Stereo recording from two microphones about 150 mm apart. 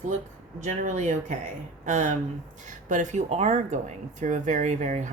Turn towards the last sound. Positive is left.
turn(degrees=-55)  # may be behind; listen again after turning